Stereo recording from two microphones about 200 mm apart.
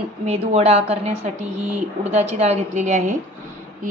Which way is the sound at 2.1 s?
30° right (ahead or behind).